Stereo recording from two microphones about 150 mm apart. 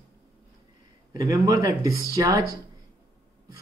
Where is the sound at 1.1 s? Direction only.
20° right (ahead or behind).